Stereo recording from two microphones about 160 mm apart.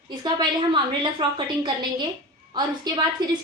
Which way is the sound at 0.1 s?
25° right (ahead or behind).